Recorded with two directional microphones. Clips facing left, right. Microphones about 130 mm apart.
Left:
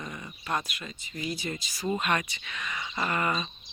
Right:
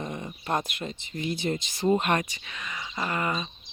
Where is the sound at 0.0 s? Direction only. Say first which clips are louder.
Right 5 dB; 25° right (ahead or behind).